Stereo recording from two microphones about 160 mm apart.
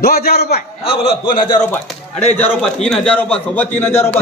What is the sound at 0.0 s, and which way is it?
Speech, 70° left (ahead or behind).